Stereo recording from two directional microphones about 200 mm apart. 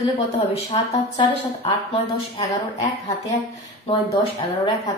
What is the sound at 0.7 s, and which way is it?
A woman's voice, 25° left (ahead or behind).